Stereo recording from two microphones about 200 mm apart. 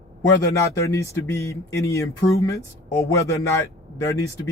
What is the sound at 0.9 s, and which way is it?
Speech, 15° left (ahead or behind).